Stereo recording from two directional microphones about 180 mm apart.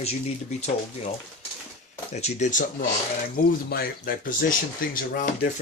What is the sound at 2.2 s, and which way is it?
Speech, 45° left (ahead or behind).